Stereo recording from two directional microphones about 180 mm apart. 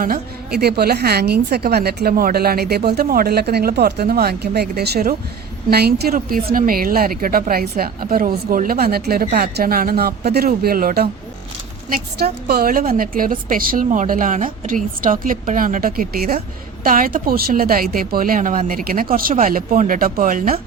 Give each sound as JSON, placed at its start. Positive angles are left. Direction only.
{"t": 0.0, "sound": "speech", "side_deg": -55}
{"t": 12.2, "sound": "a woman's voice", "side_deg": -60}